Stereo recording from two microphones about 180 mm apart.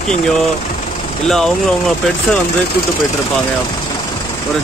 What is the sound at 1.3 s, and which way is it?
Speech, centre (ahead or behind).